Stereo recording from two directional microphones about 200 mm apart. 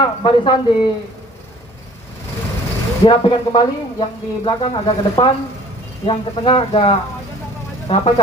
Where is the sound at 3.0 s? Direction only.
25° left (ahead or behind).